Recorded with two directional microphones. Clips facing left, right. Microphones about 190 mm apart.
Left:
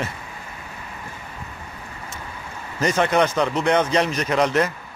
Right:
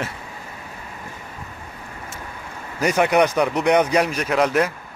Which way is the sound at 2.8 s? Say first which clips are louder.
Right 2 dB; 10° right (ahead or behind).